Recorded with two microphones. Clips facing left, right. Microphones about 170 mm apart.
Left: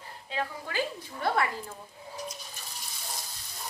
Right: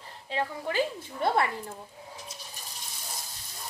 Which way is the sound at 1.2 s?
25° right (ahead or behind).